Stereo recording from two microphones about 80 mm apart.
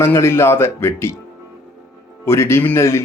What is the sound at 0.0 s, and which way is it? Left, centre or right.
Speech, left.